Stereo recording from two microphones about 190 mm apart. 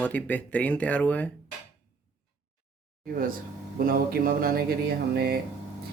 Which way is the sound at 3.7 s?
50° right (ahead or behind).